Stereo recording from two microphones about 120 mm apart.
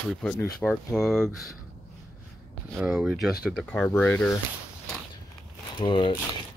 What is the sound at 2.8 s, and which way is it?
Speech, 10° right (ahead or behind).